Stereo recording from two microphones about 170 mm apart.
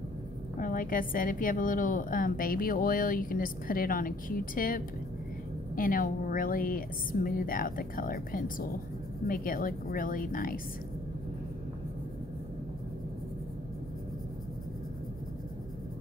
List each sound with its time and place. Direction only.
0.6 s a woman's voice: 55° left (ahead or behind)